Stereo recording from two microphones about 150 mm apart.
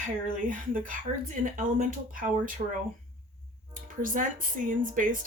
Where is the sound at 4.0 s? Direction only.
65° right (ahead or behind).